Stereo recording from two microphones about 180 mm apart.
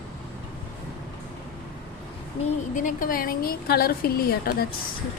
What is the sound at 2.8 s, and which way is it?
A woman's voice, 50° left (ahead or behind).